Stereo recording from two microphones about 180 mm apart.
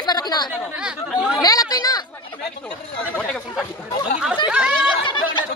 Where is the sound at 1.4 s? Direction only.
20° left (ahead or behind).